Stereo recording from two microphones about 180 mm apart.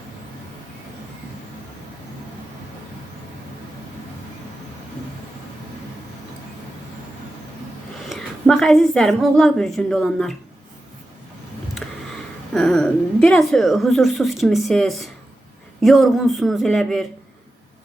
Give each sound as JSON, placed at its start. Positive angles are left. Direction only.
{"t": 8.1, "sound": "a woman's voice", "side_deg": 0}
{"t": 11.8, "sound": "a sound", "side_deg": 5}
{"t": 12.5, "sound": "a woman's voice", "side_deg": 5}